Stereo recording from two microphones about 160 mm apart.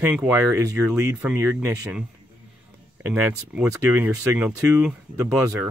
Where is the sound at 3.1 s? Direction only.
5° right (ahead or behind).